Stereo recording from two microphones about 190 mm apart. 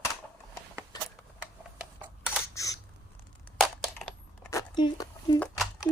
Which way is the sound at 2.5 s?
15° left (ahead or behind).